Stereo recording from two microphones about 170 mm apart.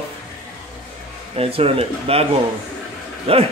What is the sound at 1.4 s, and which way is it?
Speech, 35° right (ahead or behind).